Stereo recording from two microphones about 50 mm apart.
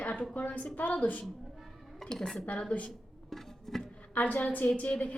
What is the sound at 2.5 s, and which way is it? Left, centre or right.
Speech, left.